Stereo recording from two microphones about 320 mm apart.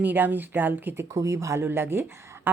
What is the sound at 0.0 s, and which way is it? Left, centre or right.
Speech, centre.